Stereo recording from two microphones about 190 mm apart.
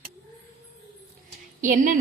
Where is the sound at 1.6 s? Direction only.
45° right (ahead or behind).